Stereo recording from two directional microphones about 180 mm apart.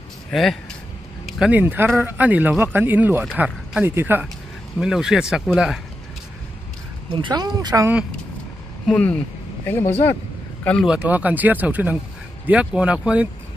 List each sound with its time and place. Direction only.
0.3 s speech: centre (ahead or behind)
7.1 s speech: 25° right (ahead or behind)
8.8 s a man's voice: 5° left (ahead or behind)
10.9 s speech: 10° right (ahead or behind)